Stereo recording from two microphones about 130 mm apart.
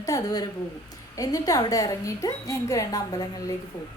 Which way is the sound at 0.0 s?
25° left (ahead or behind).